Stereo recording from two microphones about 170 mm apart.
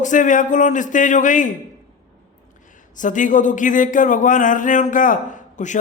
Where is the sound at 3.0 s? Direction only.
50° left (ahead or behind).